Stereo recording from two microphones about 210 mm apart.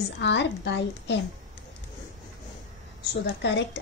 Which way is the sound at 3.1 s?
55° left (ahead or behind).